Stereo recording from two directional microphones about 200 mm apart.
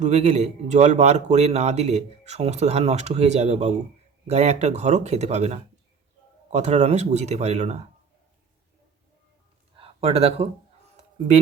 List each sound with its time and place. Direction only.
0.0 s speech: 35° right (ahead or behind)
9.7 s speech: 30° right (ahead or behind)